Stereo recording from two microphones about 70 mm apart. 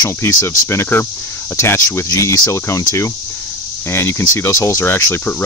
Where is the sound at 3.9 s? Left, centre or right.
Left.